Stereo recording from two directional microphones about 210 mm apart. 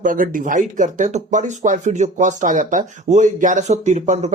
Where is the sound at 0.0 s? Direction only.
40° right (ahead or behind).